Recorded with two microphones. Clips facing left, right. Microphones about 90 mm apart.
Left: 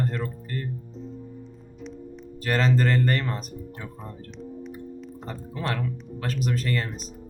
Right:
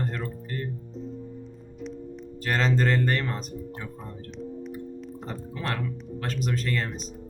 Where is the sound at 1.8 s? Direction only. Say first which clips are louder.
Right 2 dB; centre (ahead or behind).